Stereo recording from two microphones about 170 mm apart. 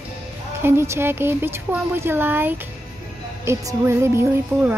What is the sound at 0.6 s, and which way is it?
Speech, 15° right (ahead or behind).